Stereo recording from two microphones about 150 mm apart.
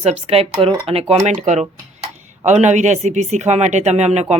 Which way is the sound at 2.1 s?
55° right (ahead or behind).